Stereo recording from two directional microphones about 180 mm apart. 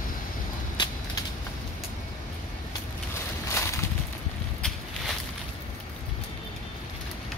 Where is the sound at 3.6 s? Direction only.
15° left (ahead or behind).